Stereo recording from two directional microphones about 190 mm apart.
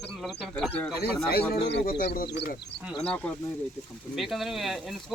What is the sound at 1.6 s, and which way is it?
Speech, 55° left (ahead or behind).